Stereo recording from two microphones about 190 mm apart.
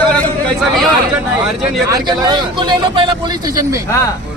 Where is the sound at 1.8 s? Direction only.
20° right (ahead or behind).